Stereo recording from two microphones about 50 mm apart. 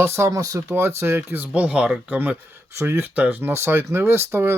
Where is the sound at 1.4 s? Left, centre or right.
Right.